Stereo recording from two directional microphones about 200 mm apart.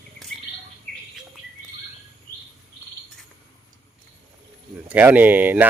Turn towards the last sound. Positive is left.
turn(degrees=-10)  # may be behind; listen again after turning